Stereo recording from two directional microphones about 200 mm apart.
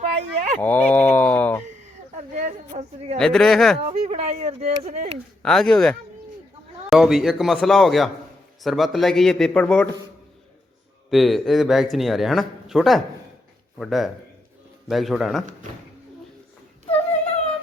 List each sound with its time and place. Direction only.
0.2 s livestock: 35° right (ahead or behind)
0.6 s livestock: 10° left (ahead or behind)
2.3 s a sound: 35° right (ahead or behind)
3.2 s a man's voice: 5° left (ahead or behind)
3.8 s speech: 35° right (ahead or behind)
5.4 s a man's voice: centre (ahead or behind)
11.1 s a man's voice: centre (ahead or behind)